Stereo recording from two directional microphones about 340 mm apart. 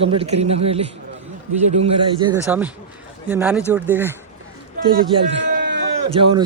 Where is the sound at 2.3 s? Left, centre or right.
Centre.